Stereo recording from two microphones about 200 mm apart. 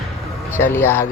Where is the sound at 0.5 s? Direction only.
10° left (ahead or behind).